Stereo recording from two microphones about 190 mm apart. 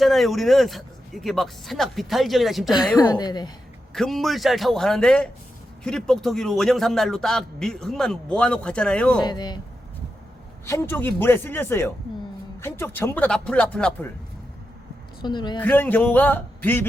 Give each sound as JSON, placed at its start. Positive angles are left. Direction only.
{"t": 0.0, "sound": "a man's voice", "side_deg": 0}
{"t": 3.1, "sound": "speech", "side_deg": 20}
{"t": 3.9, "sound": "a man's voice", "side_deg": 0}
{"t": 9.2, "sound": "speech", "side_deg": 20}
{"t": 10.7, "sound": "speech", "side_deg": 10}
{"t": 15.2, "sound": "speech", "side_deg": 25}
{"t": 15.6, "sound": "speech", "side_deg": 10}